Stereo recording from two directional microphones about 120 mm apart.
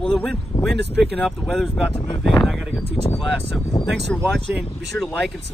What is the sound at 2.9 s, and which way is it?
Speech, 50° left (ahead or behind).